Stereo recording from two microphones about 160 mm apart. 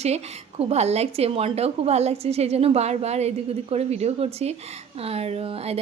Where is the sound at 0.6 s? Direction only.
40° right (ahead or behind).